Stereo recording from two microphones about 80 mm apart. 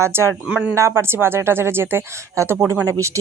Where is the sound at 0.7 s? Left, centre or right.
Right.